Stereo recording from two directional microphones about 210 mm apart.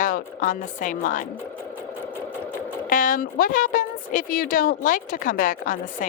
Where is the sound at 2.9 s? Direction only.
40° left (ahead or behind).